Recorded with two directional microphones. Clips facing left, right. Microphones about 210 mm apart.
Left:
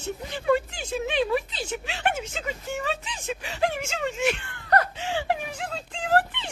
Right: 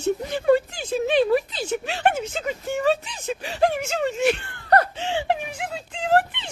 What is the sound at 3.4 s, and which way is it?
Snicker, 40° right (ahead or behind).